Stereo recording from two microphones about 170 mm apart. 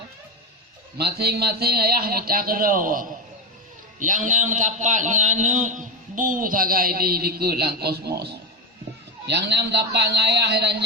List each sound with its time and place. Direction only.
0.9 s a man's voice: 65° right (ahead or behind)